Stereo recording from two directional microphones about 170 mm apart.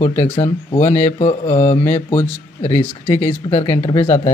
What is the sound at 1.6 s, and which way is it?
Speech, 15° left (ahead or behind).